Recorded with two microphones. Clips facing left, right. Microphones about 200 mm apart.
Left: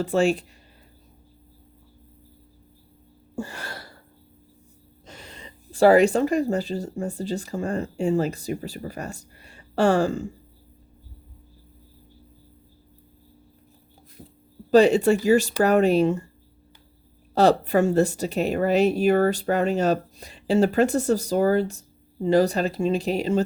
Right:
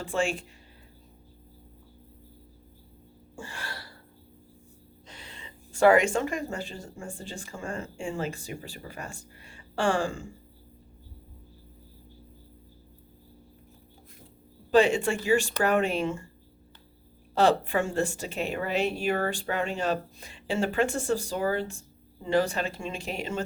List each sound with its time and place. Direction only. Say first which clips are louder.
0.0 s speech: left 8 dB; 40° left (ahead or behind)
3.3 s a sound: left 7 dB; 40° left (ahead or behind)
5.0 s speech: left 5 dB; 40° left (ahead or behind)
14.7 s speech: left 6 dB; 40° left (ahead or behind)
17.3 s speech: left 5 dB; 40° left (ahead or behind)